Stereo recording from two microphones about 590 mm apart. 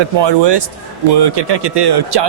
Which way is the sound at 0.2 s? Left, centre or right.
Right.